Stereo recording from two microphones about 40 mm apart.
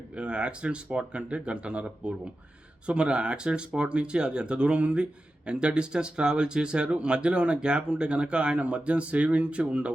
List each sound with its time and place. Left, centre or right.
0.2 s speech: right